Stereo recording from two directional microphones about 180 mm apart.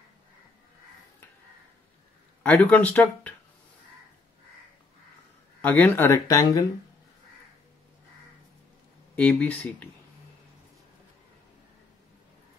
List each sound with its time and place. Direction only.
2.4 s speech: 5° left (ahead or behind)
5.6 s speech: 10° left (ahead or behind)
9.1 s speech: 10° left (ahead or behind)